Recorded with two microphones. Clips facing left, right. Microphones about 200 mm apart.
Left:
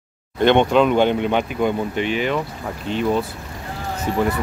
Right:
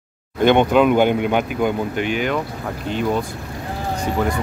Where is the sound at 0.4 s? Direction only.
5° right (ahead or behind).